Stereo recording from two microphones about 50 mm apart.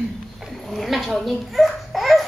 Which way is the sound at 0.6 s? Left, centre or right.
Centre.